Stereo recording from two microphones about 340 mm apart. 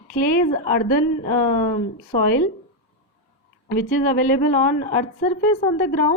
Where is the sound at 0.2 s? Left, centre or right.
Left.